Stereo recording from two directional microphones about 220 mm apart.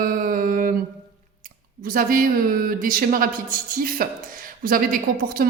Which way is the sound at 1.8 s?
40° right (ahead or behind).